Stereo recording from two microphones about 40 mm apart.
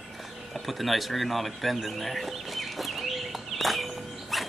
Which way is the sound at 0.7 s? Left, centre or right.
Centre.